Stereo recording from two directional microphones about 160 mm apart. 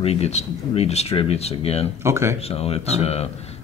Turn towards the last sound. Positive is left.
turn(degrees=40)  # may be behind; listen again after turning